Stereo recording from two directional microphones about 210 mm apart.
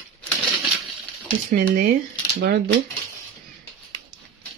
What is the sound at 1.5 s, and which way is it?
Speech, 40° right (ahead or behind).